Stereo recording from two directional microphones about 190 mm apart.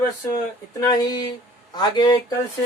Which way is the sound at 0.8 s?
20° left (ahead or behind).